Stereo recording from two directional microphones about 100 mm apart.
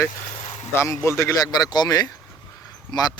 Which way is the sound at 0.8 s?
30° left (ahead or behind).